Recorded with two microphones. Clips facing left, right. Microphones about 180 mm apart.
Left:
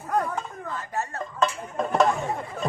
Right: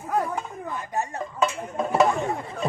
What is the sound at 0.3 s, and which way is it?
Speech, 15° right (ahead or behind).